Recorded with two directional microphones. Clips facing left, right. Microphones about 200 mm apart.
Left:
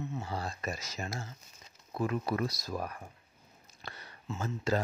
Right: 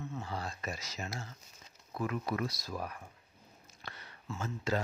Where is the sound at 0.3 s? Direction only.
35° left (ahead or behind).